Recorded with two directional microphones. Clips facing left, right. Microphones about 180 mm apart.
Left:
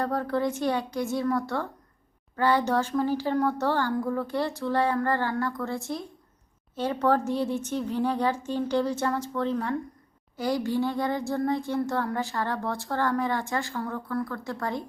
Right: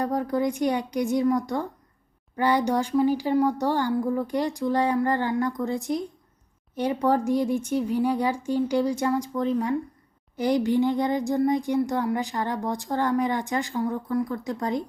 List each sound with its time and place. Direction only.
0.0 s speech: 15° right (ahead or behind)